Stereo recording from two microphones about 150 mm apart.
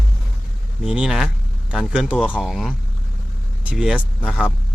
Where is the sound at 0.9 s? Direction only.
5° right (ahead or behind).